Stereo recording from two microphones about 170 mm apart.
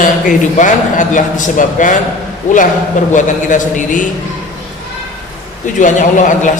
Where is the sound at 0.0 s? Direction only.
50° left (ahead or behind).